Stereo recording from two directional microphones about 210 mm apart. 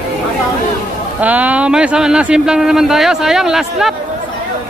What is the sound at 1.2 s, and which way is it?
Speech, 5° right (ahead or behind).